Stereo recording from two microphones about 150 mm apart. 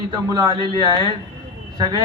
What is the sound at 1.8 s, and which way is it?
Speech, 30° right (ahead or behind).